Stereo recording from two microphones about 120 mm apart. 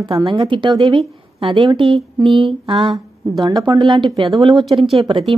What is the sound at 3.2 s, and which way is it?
Speech, 35° right (ahead or behind).